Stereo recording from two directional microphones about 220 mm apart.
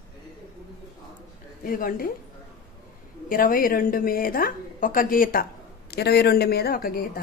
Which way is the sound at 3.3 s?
40° left (ahead or behind).